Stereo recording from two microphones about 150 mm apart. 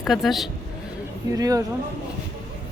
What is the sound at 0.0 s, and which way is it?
Speech, centre (ahead or behind).